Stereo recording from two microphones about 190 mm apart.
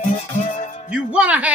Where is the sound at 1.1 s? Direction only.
5° right (ahead or behind).